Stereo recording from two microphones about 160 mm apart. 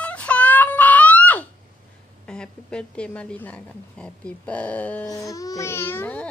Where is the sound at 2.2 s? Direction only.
5° left (ahead or behind).